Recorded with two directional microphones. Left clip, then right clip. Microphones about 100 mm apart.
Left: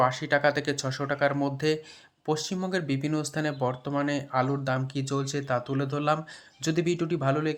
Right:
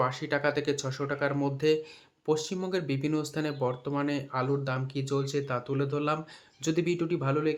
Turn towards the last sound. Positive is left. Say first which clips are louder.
# left 1 dB
turn(degrees=35)  # may be behind; listen again after turning